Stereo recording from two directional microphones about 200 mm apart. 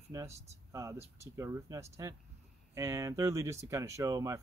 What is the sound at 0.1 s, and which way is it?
Speech, 15° right (ahead or behind).